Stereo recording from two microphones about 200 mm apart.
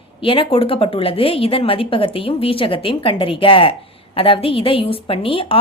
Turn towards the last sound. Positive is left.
turn(degrees=25)  # may be behind; listen again after turning